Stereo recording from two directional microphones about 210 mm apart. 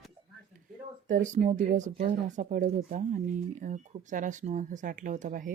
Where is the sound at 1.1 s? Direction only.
35° right (ahead or behind).